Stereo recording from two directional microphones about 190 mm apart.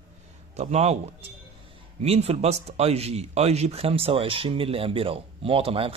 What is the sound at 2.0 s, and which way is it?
Speech, 35° right (ahead or behind).